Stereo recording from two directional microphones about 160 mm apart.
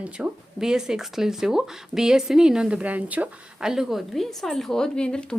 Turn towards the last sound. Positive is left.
turn(degrees=5)  # may be behind; listen again after turning